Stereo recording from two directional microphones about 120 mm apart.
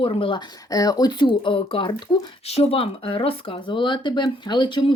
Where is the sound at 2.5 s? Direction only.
60° left (ahead or behind).